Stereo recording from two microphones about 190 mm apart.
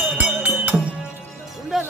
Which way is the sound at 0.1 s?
5° right (ahead or behind).